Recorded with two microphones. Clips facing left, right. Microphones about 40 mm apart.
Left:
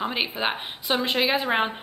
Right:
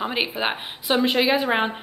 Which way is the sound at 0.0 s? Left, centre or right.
Centre.